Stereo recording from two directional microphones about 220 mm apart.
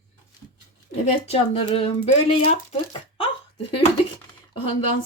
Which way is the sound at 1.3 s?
25° left (ahead or behind).